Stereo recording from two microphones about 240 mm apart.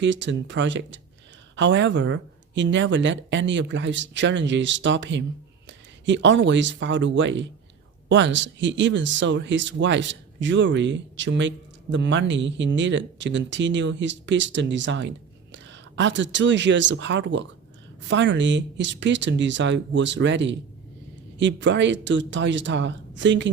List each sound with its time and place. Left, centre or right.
0.0 s speech: right